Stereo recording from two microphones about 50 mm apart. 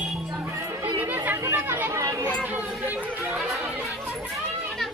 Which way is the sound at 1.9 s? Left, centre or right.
Right.